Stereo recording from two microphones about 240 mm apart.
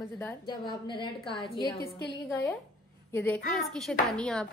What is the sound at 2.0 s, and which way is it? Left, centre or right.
Speech, left.